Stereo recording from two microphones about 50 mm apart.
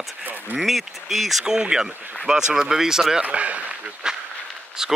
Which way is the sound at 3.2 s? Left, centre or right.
Right.